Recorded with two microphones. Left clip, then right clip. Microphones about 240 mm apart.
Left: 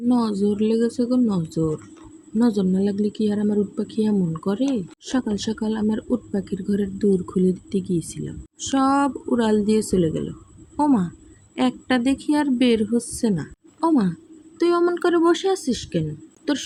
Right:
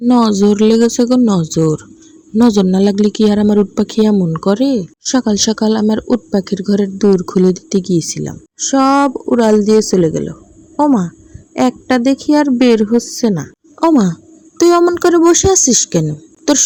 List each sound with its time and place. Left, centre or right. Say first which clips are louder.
0.1 s speech: right 11 dB; right
14.6 s speech: right 10 dB; right